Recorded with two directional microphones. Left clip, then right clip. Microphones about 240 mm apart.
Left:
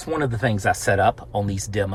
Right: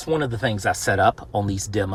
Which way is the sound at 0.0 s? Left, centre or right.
Centre.